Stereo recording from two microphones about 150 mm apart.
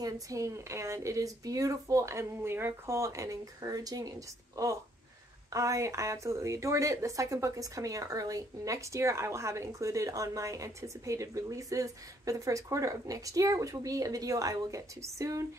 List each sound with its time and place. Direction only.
0.0 s a woman's voice: 20° right (ahead or behind)